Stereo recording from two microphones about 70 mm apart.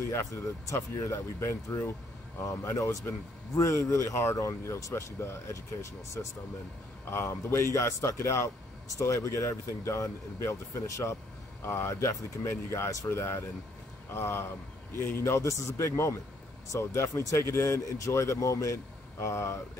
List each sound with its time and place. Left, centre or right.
0.1 s a man's voice: left
11.9 s a man's voice: left